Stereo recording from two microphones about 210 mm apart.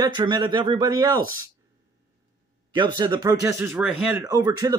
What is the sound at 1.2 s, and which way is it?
Speech, 80° left.